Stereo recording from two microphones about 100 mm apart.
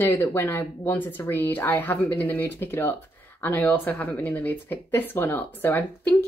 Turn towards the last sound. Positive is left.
turn(degrees=20)  # may be behind; listen again after turning